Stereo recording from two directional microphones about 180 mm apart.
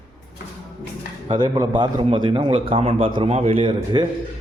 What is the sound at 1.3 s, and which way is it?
A man's voice, 25° right (ahead or behind).